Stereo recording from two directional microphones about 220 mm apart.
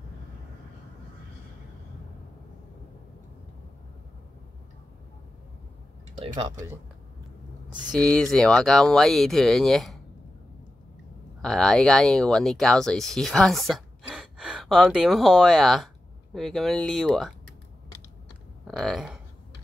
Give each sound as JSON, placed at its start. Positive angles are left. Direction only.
{"t": 6.1, "sound": "speech", "side_deg": -25}
{"t": 8.0, "sound": "speech", "side_deg": 5}
{"t": 11.4, "sound": "speech", "side_deg": 5}
{"t": 18.7, "sound": "speech", "side_deg": 0}